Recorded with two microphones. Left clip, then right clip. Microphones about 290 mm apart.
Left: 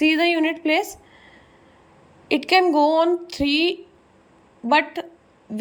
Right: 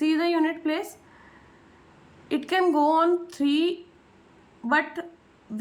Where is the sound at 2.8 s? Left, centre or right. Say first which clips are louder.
Left 3 dB; centre.